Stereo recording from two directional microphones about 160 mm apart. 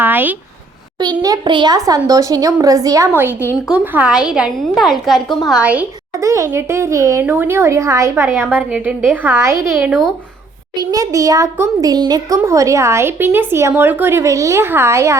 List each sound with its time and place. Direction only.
0.0 s speech: 10° right (ahead or behind)
0.9 s a child's voice: 25° right (ahead or behind)
3.7 s a woman's voice: 10° right (ahead or behind)
6.1 s a woman's voice: 20° right (ahead or behind)